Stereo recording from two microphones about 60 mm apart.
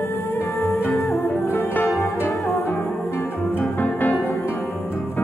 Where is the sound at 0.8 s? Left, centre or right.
Centre.